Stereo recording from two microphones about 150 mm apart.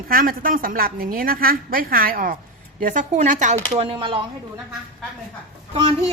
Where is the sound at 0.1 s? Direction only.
75° right (ahead or behind).